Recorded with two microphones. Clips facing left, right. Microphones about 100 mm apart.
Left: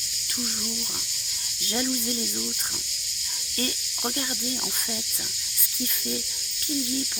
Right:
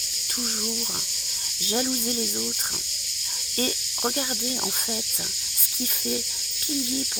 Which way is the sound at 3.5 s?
25° right (ahead or behind).